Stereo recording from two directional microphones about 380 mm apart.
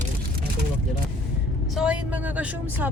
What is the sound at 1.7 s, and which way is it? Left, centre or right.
Speech, centre.